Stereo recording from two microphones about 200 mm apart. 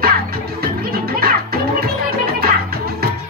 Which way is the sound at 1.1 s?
50° right (ahead or behind).